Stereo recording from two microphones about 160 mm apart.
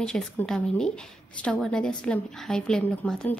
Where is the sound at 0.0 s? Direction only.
5° left (ahead or behind).